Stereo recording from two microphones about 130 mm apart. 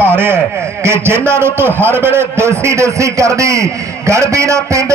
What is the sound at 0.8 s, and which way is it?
A man's voice, 20° right (ahead or behind).